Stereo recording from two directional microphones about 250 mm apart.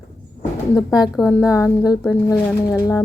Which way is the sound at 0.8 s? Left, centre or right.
Centre.